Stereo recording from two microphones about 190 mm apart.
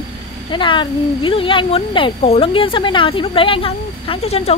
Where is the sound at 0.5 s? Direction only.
25° left (ahead or behind).